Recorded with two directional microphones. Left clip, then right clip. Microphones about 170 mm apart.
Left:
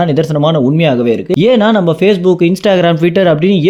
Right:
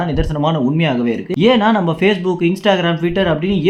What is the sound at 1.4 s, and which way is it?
Speech, 35° left (ahead or behind).